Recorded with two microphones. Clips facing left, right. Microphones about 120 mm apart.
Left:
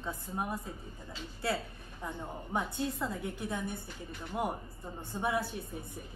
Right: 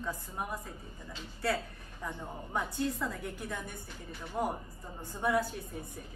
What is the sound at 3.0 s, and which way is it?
A woman's voice, 20° left (ahead or behind).